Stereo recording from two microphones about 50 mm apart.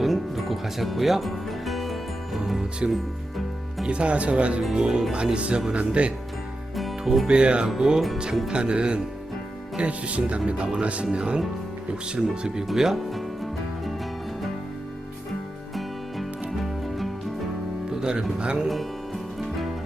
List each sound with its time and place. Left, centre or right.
0.0 s music: centre
3.8 s speech: right
4.6 s speech: centre
5.1 s speech: right
6.7 s music: centre
7.3 s speech: right
12.6 s music: centre
15.7 s music: centre
17.9 s speech: centre
18.7 s music: centre